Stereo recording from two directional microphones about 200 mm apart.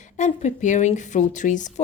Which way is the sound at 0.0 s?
35° left (ahead or behind).